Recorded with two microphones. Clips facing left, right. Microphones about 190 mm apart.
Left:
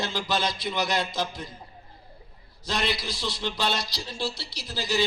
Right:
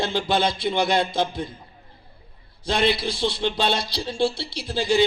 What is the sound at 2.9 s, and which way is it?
Speech, 30° right (ahead or behind).